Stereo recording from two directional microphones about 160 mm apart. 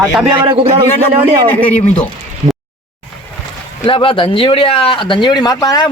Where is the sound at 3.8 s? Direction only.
35° left (ahead or behind).